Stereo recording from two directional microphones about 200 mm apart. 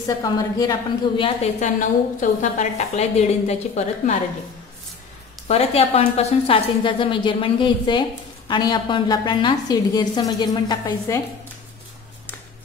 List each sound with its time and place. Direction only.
0.0 s a woman's voice: 20° left (ahead or behind); by 4.2 s 35° left (ahead or behind)
5.5 s a woman's voice: 30° left (ahead or behind)